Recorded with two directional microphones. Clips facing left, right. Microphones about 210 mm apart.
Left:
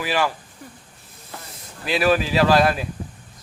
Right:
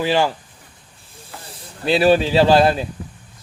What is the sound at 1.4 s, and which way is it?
Speech, 30° right (ahead or behind).